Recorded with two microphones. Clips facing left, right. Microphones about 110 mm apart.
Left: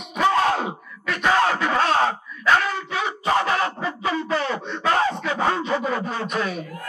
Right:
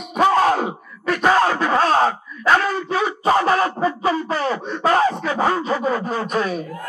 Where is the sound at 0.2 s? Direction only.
35° right (ahead or behind).